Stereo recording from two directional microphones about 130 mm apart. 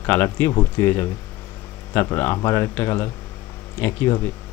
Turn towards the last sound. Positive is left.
turn(degrees=15)  # may be behind; listen again after turning